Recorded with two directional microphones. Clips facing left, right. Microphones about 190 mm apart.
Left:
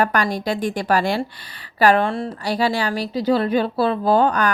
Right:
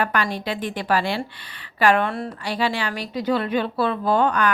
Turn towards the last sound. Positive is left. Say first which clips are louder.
# left 3 dB
turn(degrees=35)  # may be behind; listen again after turning